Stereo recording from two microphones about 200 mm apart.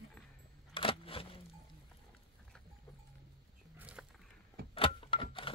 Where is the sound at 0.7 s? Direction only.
25° left (ahead or behind).